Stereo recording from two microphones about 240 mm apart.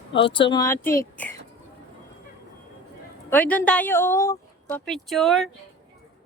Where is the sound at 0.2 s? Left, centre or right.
Left.